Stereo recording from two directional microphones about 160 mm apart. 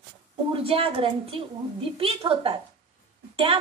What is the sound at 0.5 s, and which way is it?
A woman's voice, 35° right (ahead or behind).